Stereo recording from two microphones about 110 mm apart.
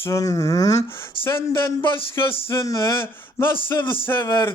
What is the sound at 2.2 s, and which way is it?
Speech, 60° left (ahead or behind).